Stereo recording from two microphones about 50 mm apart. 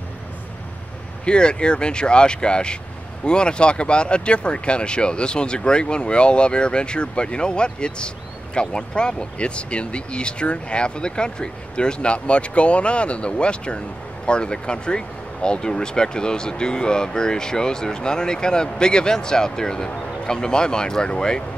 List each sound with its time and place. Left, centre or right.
1.2 s speech: centre